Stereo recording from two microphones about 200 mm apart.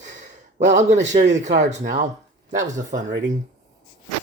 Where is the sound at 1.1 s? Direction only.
35° right (ahead or behind).